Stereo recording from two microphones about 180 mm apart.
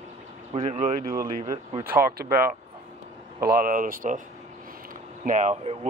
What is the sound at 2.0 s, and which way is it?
Speech, 55° right (ahead or behind).